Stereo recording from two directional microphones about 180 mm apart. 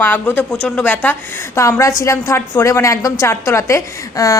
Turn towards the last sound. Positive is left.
turn(degrees=15)  # may be behind; listen again after turning